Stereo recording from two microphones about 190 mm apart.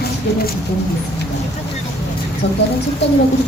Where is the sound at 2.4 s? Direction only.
70° left (ahead or behind).